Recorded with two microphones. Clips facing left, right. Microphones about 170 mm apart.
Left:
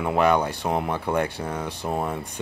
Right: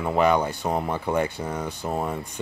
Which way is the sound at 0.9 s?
5° right (ahead or behind).